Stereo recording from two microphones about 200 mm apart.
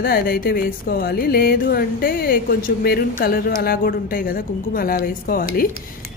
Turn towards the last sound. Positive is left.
turn(degrees=45)  # may be behind; listen again after turning